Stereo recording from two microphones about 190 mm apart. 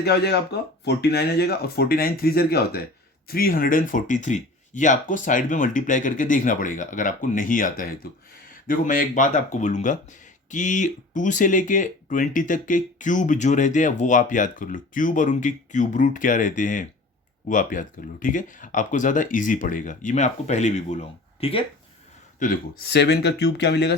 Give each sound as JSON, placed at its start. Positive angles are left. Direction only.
{"t": 0.0, "sound": "speech", "side_deg": 60}
{"t": 22.4, "sound": "speech", "side_deg": 50}